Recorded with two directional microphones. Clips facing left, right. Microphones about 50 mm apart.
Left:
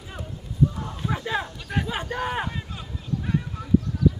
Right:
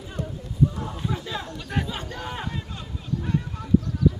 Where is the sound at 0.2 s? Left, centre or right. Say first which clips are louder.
Right 8 dB; centre.